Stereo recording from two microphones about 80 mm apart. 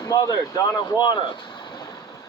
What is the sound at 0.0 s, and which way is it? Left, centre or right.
Speech, left.